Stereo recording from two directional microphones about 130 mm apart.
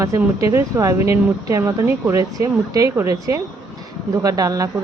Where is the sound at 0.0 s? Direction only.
25° right (ahead or behind).